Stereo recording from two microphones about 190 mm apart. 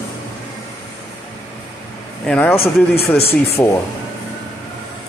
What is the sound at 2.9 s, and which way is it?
Speech, 55° left (ahead or behind).